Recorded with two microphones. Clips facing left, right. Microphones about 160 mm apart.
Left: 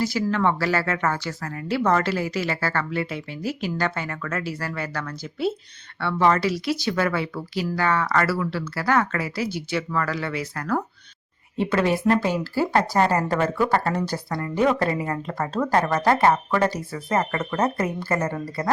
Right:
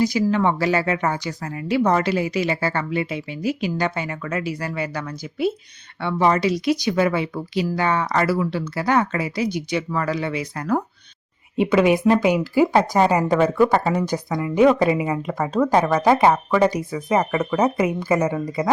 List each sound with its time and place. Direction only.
0.0 s speech: 15° right (ahead or behind)